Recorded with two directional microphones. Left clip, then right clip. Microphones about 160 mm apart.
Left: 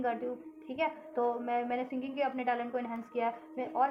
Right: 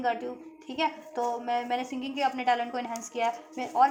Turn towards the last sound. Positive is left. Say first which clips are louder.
# right 7 dB
turn(degrees=-25)  # may be behind; listen again after turning